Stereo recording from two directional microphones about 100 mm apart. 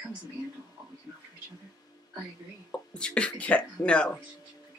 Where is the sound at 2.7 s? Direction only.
10° left (ahead or behind).